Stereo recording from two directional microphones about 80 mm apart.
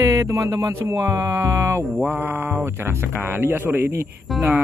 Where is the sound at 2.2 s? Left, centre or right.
Right.